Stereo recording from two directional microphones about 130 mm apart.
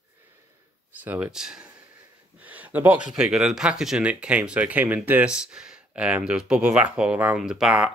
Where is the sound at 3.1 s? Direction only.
5° right (ahead or behind).